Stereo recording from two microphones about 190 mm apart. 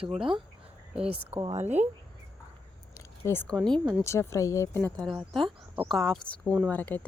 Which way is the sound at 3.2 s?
10° left (ahead or behind).